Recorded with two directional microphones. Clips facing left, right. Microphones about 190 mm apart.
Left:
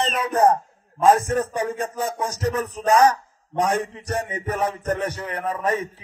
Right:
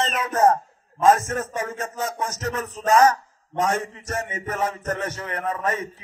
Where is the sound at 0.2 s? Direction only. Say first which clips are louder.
Left 1 dB; 15° left (ahead or behind).